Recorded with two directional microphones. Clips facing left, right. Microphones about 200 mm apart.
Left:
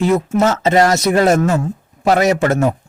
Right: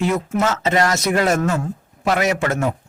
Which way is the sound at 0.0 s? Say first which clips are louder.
Left 5 dB; 35° left (ahead or behind).